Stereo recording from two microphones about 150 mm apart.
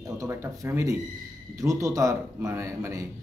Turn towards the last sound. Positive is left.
turn(degrees=-20)  # may be behind; listen again after turning